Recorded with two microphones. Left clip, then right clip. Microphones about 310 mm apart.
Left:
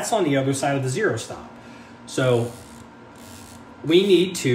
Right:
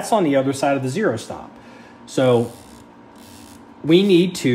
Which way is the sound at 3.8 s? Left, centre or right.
Right.